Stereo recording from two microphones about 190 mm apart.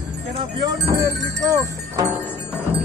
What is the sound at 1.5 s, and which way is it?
Music, 15° right (ahead or behind).